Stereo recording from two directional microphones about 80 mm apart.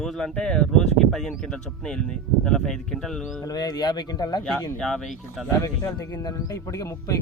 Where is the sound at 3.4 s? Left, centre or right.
Left.